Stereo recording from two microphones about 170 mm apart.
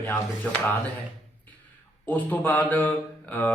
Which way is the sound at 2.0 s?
10° left (ahead or behind).